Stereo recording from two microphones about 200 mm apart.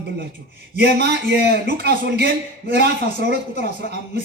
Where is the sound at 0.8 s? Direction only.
55° right (ahead or behind).